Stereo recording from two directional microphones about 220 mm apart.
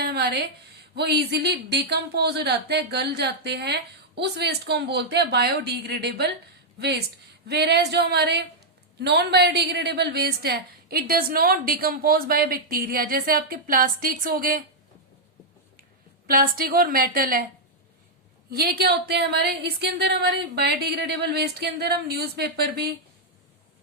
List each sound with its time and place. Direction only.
0.0 s a sound: 50° right (ahead or behind)
0.9 s a woman's voice: 50° right (ahead or behind)
16.2 s a woman's voice: 40° right (ahead or behind)
18.5 s speech: 45° right (ahead or behind)